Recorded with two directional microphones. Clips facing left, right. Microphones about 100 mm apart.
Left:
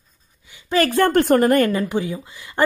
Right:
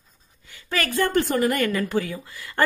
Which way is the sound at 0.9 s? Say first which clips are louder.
Left 5 dB; 55° left (ahead or behind).